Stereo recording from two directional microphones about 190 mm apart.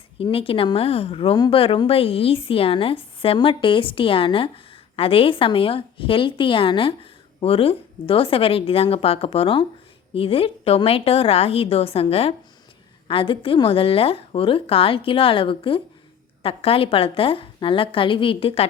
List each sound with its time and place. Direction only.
0.2 s a woman's voice: 30° left (ahead or behind)